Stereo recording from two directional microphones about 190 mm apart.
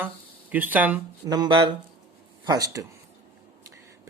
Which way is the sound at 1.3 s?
20° right (ahead or behind).